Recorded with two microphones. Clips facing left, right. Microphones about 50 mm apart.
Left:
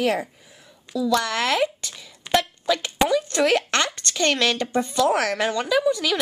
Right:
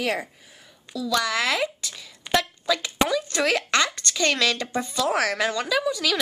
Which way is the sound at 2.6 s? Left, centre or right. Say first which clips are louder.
Left 2 dB; centre.